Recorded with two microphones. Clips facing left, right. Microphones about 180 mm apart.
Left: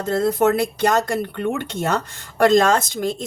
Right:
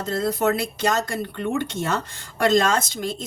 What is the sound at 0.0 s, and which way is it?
Speech, 50° left (ahead or behind).